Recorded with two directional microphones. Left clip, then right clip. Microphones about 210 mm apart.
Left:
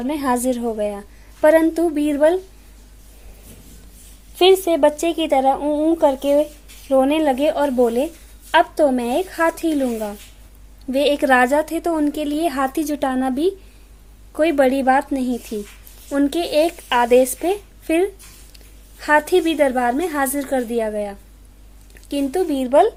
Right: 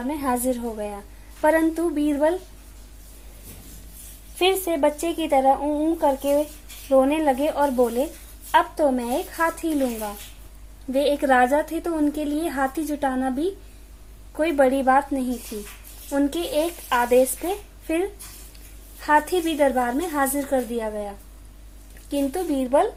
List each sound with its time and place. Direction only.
0.1 s speech: 40° left (ahead or behind)
4.4 s speech: 40° left (ahead or behind)